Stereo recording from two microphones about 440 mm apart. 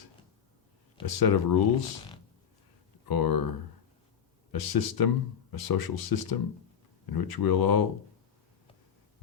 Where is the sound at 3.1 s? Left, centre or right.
Left.